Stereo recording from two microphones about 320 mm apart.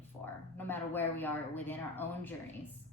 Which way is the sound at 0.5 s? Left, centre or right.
Centre.